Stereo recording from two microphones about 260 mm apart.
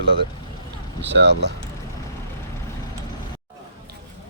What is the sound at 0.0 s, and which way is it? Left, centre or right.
Speech, right.